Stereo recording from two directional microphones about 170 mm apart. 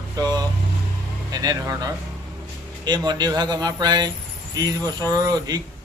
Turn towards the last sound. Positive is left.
turn(degrees=-20)  # may be behind; listen again after turning